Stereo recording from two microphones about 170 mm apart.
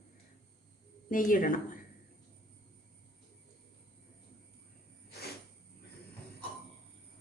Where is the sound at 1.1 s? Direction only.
50° left (ahead or behind).